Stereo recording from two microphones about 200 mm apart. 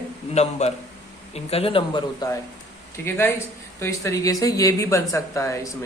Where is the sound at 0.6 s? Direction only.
35° left (ahead or behind).